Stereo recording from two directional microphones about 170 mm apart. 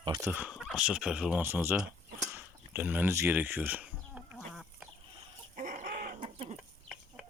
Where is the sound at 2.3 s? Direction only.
10° right (ahead or behind).